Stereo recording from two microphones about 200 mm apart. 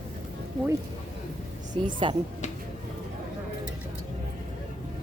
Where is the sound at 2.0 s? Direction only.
25° right (ahead or behind).